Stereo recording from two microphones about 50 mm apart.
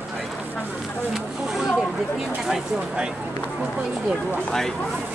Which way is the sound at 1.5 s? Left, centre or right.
Centre.